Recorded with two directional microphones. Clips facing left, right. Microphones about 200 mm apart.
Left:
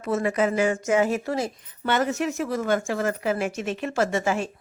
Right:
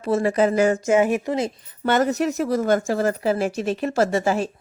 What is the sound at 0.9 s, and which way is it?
Speech, 20° right (ahead or behind).